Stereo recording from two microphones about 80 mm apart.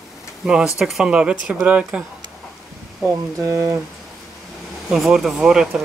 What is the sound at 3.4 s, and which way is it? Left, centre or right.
Speech, right.